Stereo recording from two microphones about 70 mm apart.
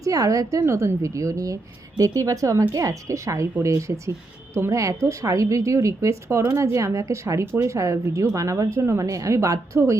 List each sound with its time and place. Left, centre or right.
0.0 s speech: right
0.6 s a woman's voice: right
4.8 s speech: right